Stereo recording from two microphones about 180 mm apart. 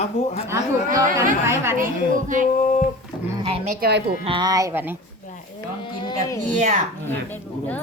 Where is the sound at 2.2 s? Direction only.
45° right (ahead or behind).